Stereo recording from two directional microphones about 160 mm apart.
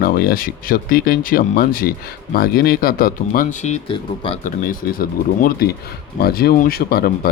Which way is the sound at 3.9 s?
35° left (ahead or behind).